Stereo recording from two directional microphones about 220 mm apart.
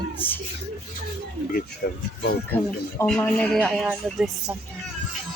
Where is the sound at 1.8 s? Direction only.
40° left (ahead or behind).